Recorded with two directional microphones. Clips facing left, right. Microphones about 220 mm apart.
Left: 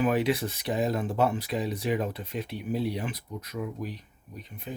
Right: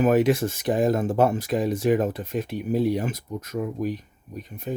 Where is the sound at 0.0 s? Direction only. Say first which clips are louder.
Right 6 dB; 45° right (ahead or behind).